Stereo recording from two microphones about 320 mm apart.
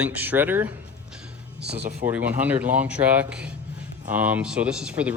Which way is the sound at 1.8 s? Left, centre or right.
Right.